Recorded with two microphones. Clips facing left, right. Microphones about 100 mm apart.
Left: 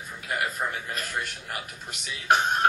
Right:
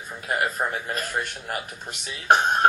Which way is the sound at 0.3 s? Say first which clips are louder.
Right 4 dB; 35° right (ahead or behind).